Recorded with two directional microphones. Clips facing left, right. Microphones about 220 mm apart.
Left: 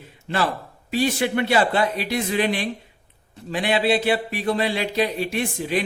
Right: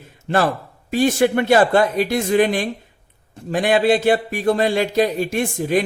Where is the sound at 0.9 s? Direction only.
45° right (ahead or behind).